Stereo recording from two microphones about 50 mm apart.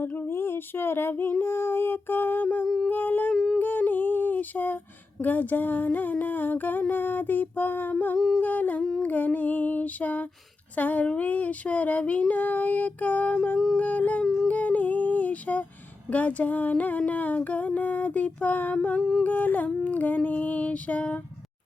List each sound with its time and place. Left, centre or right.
0.1 s female singing: left
2.9 s humming: left
3.3 s a sound: centre
3.6 s a sound: left
5.2 s humming: left
14.4 s music: left
16.0 s humming: left
19.2 s humming: left